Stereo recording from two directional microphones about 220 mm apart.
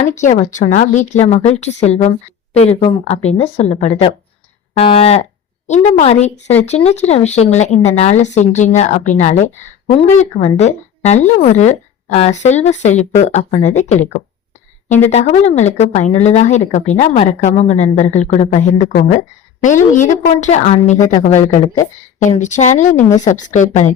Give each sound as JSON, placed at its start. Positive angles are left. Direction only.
{"t": 0.1, "sound": "speech", "side_deg": 35}